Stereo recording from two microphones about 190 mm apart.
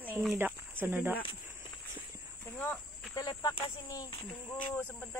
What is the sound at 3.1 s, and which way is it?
Speech, 20° left (ahead or behind).